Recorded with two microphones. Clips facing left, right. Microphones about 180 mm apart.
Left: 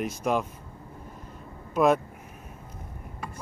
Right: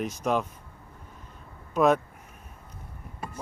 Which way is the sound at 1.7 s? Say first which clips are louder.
Even; 10° left (ahead or behind).